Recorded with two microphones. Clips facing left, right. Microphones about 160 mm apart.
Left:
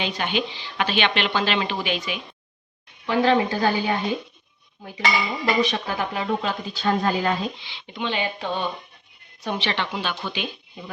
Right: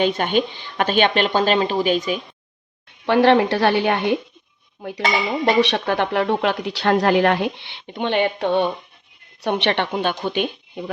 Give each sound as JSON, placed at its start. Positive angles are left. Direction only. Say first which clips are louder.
{"t": 0.0, "sound": "speech", "louder": "right 7 dB", "side_deg": -50}
{"t": 3.1, "sound": "speech", "louder": "right 5 dB", "side_deg": -70}